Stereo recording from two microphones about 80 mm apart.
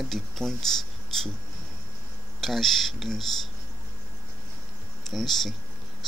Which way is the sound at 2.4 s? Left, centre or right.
Centre.